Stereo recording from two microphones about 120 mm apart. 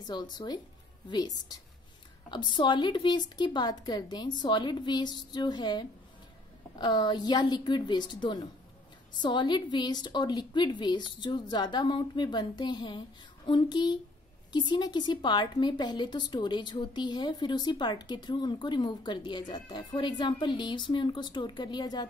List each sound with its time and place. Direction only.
0.0 s a woman's voice: 35° left (ahead or behind)